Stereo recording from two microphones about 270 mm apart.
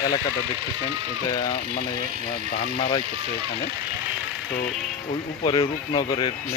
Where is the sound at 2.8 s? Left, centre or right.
Centre.